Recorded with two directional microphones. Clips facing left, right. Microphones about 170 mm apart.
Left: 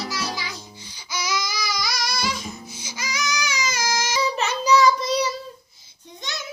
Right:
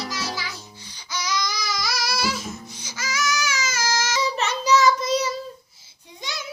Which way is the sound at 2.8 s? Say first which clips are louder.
Right 2 dB; 10° left (ahead or behind).